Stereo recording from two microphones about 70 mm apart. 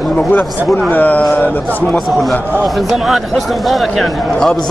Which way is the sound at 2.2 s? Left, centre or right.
Centre.